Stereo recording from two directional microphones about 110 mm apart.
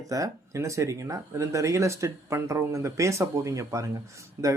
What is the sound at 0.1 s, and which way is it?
Speech, 30° right (ahead or behind).